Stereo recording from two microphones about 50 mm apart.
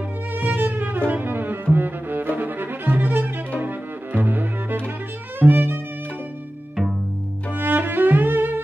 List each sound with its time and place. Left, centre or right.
0.4 s cello: right
5.4 s violin: right
7.5 s music: right